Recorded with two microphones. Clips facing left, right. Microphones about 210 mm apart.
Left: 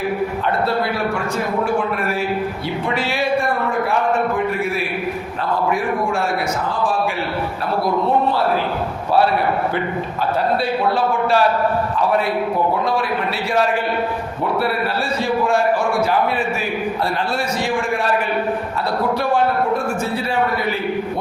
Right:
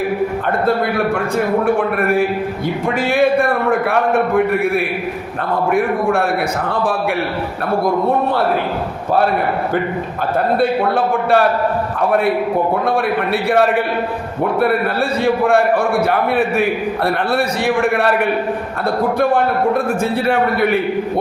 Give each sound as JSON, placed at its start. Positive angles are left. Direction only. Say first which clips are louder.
{"t": 1.6, "sound": "a man's voice", "louder": "right 4 dB", "side_deg": -55}
{"t": 3.7, "sound": "a man's voice", "louder": "right 4 dB", "side_deg": -60}
{"t": 10.6, "sound": "a man's voice", "louder": "right 3 dB", "side_deg": -55}
{"t": 15.2, "sound": "a man's voice", "louder": "right 4 dB", "side_deg": -60}
{"t": 20.2, "sound": "a man's voice", "louder": "right 5 dB", "side_deg": -65}